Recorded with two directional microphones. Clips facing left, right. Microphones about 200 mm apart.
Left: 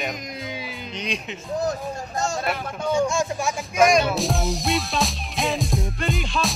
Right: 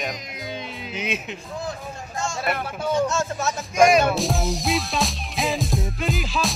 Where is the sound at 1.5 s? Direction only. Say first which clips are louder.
Left 7 dB; 40° left (ahead or behind).